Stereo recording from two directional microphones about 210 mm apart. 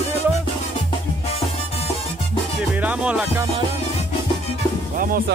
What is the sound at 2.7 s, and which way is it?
Music, 5° right (ahead or behind).